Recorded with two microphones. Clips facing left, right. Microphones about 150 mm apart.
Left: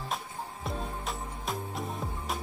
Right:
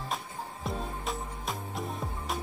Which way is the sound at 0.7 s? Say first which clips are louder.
Right 1 dB; centre (ahead or behind).